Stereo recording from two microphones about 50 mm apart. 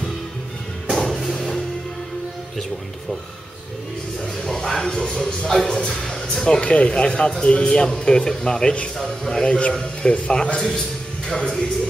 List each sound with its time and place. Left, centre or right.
0.8 s music: centre
4.2 s speech: centre